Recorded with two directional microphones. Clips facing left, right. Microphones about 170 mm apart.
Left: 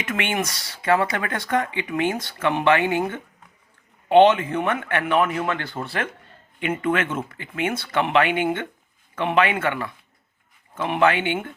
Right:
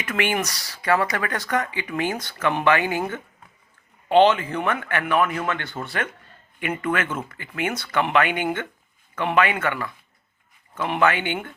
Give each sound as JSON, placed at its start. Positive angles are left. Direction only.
{"t": 0.0, "sound": "speech", "side_deg": 25}
{"t": 11.0, "sound": "speech", "side_deg": 30}